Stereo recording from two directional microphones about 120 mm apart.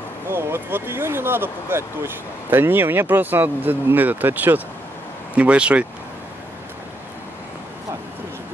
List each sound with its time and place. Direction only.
0.3 s speech: 15° right (ahead or behind)